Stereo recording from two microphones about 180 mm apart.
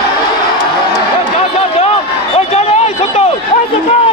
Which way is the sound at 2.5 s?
35° left (ahead or behind).